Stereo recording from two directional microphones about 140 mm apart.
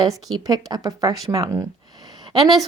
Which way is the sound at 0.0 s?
25° right (ahead or behind).